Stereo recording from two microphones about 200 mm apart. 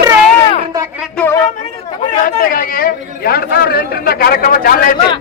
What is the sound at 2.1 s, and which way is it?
A man's voice, 45° left (ahead or behind).